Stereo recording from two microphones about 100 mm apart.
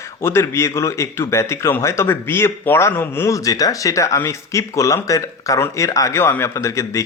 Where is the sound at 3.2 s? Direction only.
35° left (ahead or behind).